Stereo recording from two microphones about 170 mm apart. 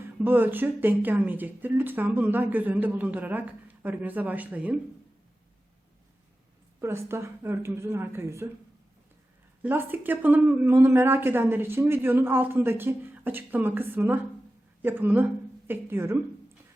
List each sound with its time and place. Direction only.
0.0 s speech: 10° right (ahead or behind)
6.8 s speech: 15° right (ahead or behind)
9.6 s a woman's voice: 10° right (ahead or behind)